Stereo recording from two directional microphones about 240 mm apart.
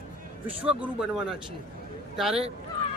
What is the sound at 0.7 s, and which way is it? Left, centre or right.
Speech, centre.